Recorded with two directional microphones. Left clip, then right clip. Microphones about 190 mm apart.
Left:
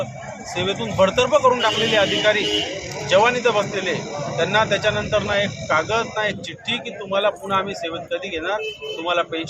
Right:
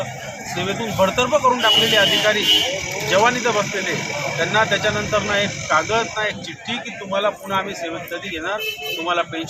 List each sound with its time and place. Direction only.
0.6 s speech: 20° left (ahead or behind)